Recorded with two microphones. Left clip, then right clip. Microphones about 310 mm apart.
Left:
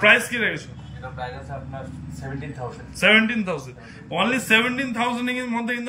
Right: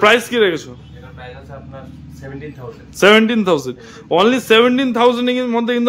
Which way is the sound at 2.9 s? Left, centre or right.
Centre.